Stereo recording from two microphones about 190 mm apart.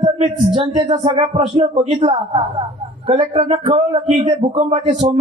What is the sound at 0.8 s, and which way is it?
A man's voice, 25° right (ahead or behind).